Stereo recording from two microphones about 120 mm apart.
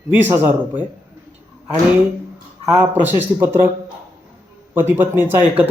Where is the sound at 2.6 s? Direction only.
15° right (ahead or behind).